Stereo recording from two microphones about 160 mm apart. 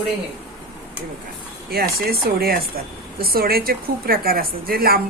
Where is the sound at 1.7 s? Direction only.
70° right (ahead or behind).